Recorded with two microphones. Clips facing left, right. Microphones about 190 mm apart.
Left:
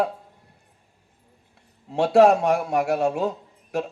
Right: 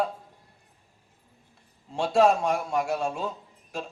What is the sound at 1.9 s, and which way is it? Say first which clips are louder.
A man's voice: left 5 dB; 65° left (ahead or behind).